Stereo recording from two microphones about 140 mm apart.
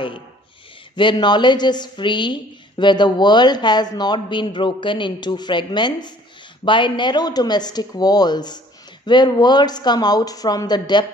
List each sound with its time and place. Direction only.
0.9 s a woman's voice: 35° left (ahead or behind)